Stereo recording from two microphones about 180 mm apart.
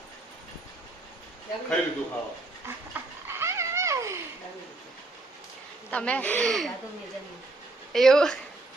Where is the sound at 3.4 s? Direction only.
15° right (ahead or behind).